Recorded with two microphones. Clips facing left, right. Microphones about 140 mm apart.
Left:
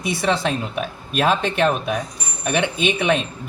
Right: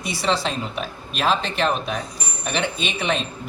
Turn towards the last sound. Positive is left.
turn(degrees=55)  # may be behind; listen again after turning